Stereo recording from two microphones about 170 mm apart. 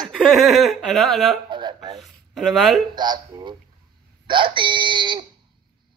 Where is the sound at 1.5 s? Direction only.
25° right (ahead or behind).